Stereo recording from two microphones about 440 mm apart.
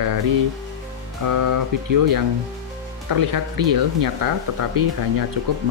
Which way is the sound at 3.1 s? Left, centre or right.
Right.